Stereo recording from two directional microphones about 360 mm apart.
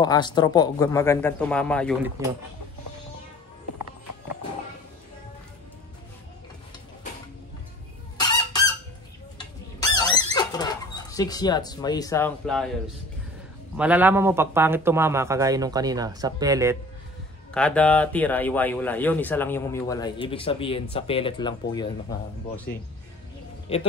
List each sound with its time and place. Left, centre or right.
0.0 s a man's voice: centre
8.2 s fowl: centre
10.3 s speech: centre
17.6 s a man's voice: centre